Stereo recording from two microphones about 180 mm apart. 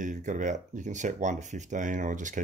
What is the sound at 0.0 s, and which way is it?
Speech, 45° right (ahead or behind).